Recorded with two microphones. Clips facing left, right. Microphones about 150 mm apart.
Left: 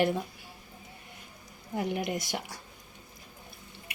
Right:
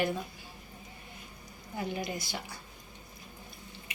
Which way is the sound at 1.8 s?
70° left (ahead or behind).